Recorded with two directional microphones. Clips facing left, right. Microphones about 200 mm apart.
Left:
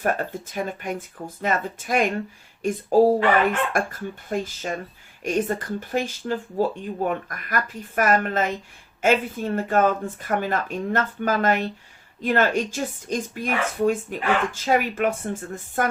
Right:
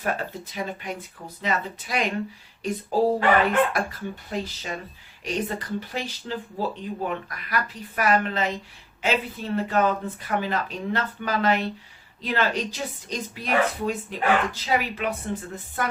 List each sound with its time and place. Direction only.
0.0 s speech: 50° left (ahead or behind)
4.3 s speech: 45° left (ahead or behind)